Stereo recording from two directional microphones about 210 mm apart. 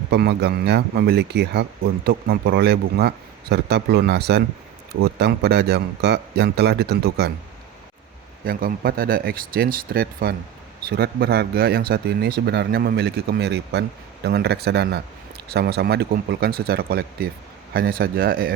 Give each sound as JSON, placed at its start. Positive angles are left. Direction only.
{"t": 0.1, "sound": "speech", "side_deg": -50}
{"t": 8.4, "sound": "speech", "side_deg": -45}